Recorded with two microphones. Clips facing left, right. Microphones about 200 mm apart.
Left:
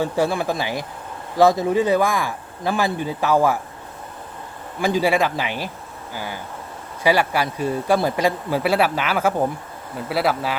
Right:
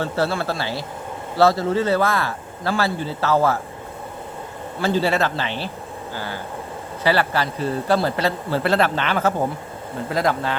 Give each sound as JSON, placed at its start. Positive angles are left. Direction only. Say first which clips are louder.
{"t": 0.0, "sound": "speech", "louder": "left 2 dB", "side_deg": 15}
{"t": 4.8, "sound": "speech", "louder": "left 1 dB", "side_deg": 15}